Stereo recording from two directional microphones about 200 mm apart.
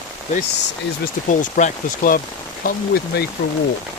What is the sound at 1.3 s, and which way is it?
Speech, 40° left (ahead or behind).